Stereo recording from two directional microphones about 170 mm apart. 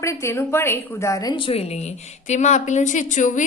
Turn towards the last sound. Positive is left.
turn(degrees=45)  # may be behind; listen again after turning